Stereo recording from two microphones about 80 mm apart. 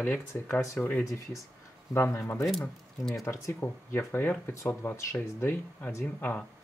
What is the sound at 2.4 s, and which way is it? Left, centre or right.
Speech, centre.